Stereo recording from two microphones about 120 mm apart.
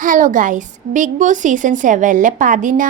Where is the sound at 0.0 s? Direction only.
90° right.